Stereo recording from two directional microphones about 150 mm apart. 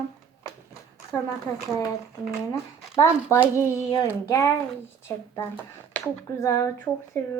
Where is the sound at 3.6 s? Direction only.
20° left (ahead or behind).